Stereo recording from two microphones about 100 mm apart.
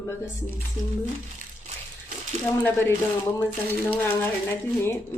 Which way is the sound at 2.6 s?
20° left (ahead or behind).